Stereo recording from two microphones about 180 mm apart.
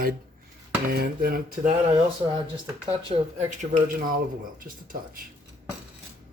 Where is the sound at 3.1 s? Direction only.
35° right (ahead or behind).